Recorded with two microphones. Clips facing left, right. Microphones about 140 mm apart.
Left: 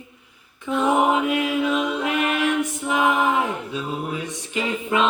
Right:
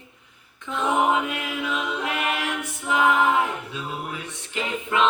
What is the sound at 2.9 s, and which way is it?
A capella, 20° left (ahead or behind).